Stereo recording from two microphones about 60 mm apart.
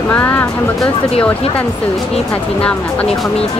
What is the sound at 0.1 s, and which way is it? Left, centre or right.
Speech, left.